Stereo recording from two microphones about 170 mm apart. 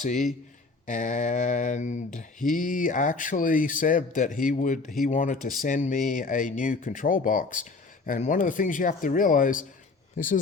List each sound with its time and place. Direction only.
0.0 s speech: 45° left (ahead or behind)